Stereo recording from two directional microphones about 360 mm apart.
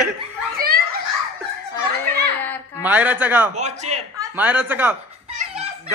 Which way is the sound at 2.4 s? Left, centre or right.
Centre.